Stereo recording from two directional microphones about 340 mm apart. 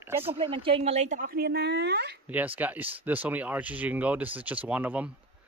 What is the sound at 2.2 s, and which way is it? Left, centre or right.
Speech, centre.